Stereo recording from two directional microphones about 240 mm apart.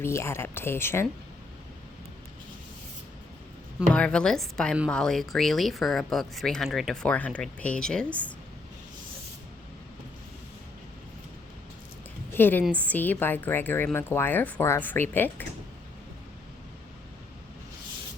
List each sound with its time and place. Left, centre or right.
0.0 s a woman's voice: centre
3.8 s a woman's voice: centre
12.3 s a woman's voice: centre